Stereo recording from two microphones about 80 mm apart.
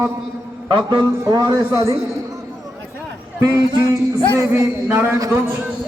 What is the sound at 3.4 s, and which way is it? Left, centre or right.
Speech, right.